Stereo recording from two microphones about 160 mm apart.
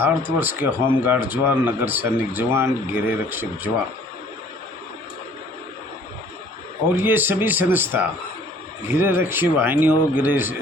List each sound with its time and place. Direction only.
0.0 s speech: 10° right (ahead or behind)
6.8 s speech: 10° right (ahead or behind)